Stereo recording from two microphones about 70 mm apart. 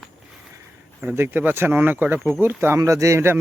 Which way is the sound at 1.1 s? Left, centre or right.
Right.